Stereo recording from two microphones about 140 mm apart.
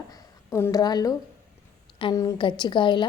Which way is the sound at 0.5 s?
20° left (ahead or behind).